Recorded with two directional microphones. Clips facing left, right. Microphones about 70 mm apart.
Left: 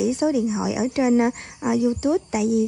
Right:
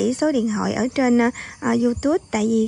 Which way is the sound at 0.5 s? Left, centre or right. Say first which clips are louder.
Right 2 dB; right.